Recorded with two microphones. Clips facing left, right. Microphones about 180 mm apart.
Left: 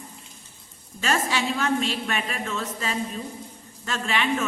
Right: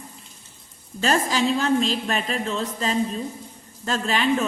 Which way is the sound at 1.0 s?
35° right (ahead or behind).